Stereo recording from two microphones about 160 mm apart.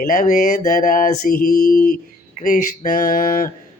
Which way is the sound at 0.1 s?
55° left (ahead or behind).